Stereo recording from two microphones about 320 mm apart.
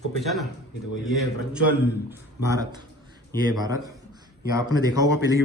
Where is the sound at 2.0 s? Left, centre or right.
Centre.